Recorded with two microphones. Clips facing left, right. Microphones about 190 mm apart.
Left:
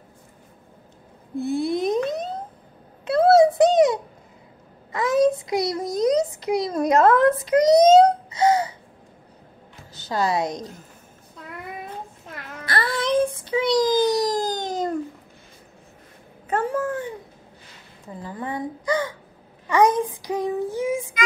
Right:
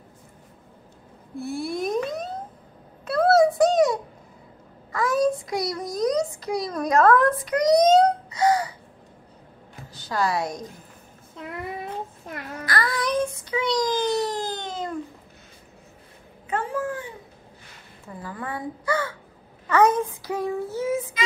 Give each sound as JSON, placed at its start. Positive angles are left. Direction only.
{"t": 1.3, "sound": "a sound", "side_deg": 20}
{"t": 3.5, "sound": "a sound", "side_deg": 20}
{"t": 7.8, "sound": "wail", "side_deg": 25}
{"t": 10.0, "sound": "a woman's voice", "side_deg": 20}
{"t": 12.6, "sound": "child singing", "side_deg": 25}
{"t": 13.4, "sound": "a sound", "side_deg": 30}
{"t": 16.4, "sound": "cat", "side_deg": 40}
{"t": 18.0, "sound": "speech", "side_deg": 20}
{"t": 19.7, "sound": "child singing", "side_deg": 15}